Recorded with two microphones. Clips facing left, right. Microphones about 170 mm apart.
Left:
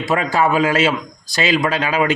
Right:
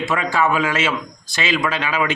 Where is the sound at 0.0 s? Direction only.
40° left (ahead or behind).